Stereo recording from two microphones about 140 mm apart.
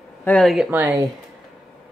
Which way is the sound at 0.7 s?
20° right (ahead or behind).